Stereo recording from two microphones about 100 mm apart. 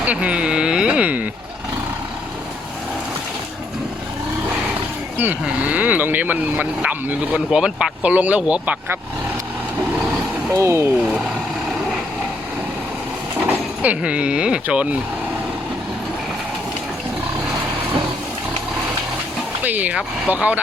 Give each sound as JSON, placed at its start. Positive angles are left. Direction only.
{"t": 0.0, "sound": "speech", "side_deg": -15}
{"t": 5.1, "sound": "speech", "side_deg": -15}
{"t": 10.5, "sound": "speech", "side_deg": -30}
{"t": 13.4, "sound": "speech", "side_deg": -15}
{"t": 19.6, "sound": "speech", "side_deg": -15}